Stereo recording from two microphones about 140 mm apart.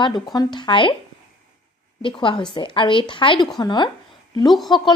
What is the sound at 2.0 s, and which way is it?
A woman's voice, 35° left (ahead or behind).